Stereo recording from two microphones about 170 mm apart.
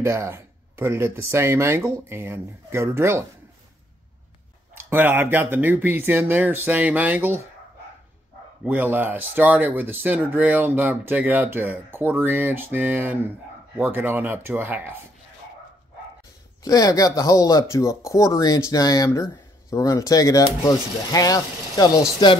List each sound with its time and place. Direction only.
0.0 s speech: 15° right (ahead or behind)
4.7 s speech: 10° right (ahead or behind)
8.6 s speech: 10° right (ahead or behind)
16.6 s speech: 20° left (ahead or behind)